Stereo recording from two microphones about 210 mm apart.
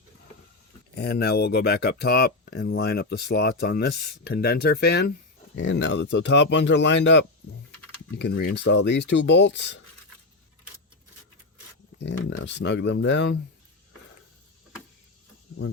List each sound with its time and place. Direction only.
0.9 s speech: 50° left (ahead or behind)
5.5 s speech: 60° left (ahead or behind)
11.9 s speech: 60° left (ahead or behind)